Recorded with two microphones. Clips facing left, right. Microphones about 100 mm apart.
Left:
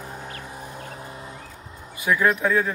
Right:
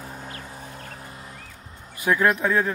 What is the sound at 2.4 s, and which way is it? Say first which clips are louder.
Speech: even; 40° right (ahead or behind).